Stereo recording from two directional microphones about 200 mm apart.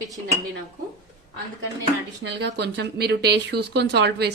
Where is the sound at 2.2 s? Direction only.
60° right (ahead or behind).